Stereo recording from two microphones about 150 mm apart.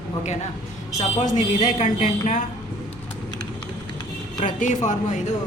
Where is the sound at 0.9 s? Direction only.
60° left (ahead or behind).